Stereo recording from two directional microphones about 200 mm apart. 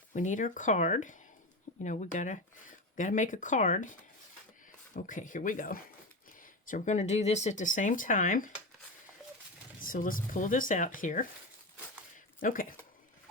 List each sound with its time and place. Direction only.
0.1 s speech: 40° left (ahead or behind)
4.9 s speech: 40° left (ahead or behind)
9.8 s speech: 45° left (ahead or behind)
12.1 s zipper: 40° left (ahead or behind)